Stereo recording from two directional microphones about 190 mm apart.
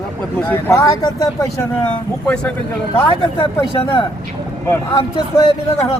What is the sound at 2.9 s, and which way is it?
Speech, 25° left (ahead or behind).